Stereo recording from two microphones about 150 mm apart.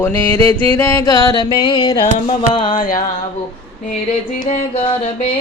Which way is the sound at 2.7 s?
65° left (ahead or behind).